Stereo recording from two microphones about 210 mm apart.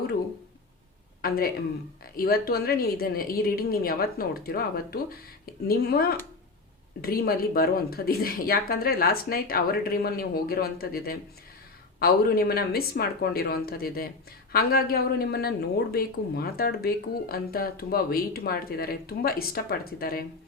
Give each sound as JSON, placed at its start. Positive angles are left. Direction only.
{"t": 1.2, "sound": "a woman's voice", "side_deg": 45}